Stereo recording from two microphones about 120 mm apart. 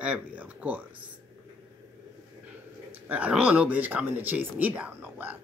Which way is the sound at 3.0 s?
10° right (ahead or behind).